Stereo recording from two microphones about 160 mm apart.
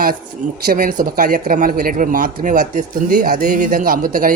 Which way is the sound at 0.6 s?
65° right (ahead or behind).